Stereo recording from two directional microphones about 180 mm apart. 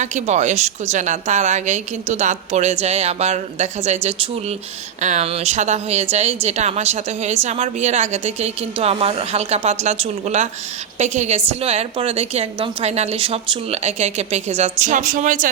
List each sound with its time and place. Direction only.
0.0 s a woman's voice: 40° right (ahead or behind)